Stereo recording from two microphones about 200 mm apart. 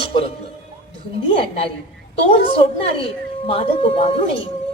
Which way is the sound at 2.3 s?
30° left (ahead or behind).